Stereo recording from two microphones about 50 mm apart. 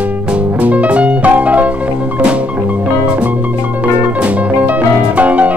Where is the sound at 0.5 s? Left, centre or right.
Right.